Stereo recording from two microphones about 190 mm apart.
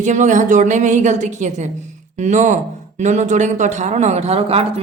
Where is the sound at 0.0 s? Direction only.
40° right (ahead or behind).